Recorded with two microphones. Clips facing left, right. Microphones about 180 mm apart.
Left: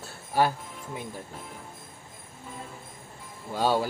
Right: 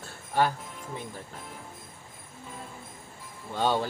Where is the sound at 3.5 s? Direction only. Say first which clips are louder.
Left 2 dB; 10° left (ahead or behind).